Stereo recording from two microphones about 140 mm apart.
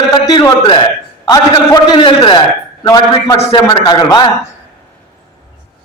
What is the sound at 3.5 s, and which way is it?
Speech, 30° left (ahead or behind).